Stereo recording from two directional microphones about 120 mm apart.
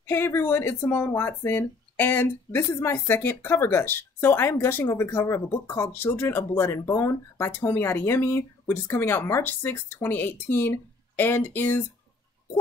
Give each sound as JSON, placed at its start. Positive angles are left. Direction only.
{"t": 0.0, "sound": "speech", "side_deg": 20}